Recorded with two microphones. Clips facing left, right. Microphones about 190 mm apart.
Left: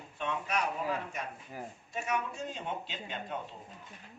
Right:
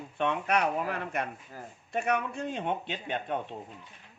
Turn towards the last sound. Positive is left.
turn(degrees=-60)  # may be behind; listen again after turning